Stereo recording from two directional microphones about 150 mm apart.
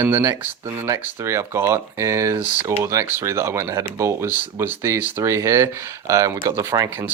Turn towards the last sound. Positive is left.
turn(degrees=-20)  # may be behind; listen again after turning